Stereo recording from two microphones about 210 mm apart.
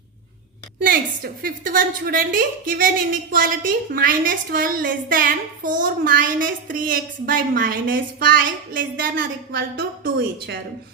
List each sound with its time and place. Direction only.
0.8 s a woman's voice: 45° right (ahead or behind)